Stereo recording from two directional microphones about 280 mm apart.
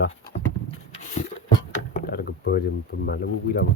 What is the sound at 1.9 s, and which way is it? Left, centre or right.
Speech, left.